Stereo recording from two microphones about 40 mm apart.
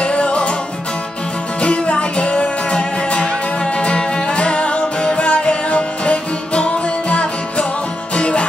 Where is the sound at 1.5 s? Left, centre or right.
Left.